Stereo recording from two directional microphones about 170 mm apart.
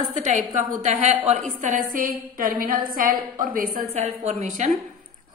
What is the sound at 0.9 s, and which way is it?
Speech, 35° right (ahead or behind).